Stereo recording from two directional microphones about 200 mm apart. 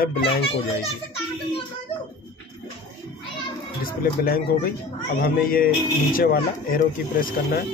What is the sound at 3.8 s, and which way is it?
Speech, 50° left (ahead or behind).